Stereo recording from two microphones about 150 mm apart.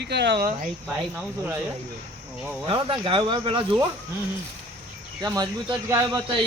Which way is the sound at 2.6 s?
35° right (ahead or behind).